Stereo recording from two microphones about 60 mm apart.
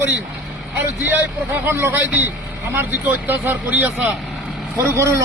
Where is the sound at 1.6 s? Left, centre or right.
Right.